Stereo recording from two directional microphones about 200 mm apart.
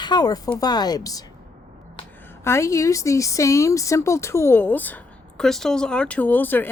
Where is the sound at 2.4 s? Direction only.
15° left (ahead or behind).